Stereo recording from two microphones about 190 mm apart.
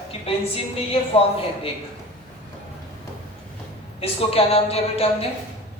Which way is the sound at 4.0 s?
30° left (ahead or behind).